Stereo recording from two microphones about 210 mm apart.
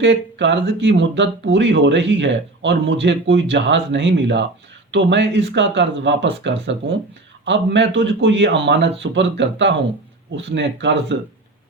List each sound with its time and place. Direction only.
0.0 s speech: 55° right (ahead or behind)